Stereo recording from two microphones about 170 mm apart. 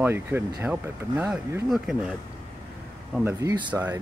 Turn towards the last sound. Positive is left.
turn(degrees=-20)  # may be behind; listen again after turning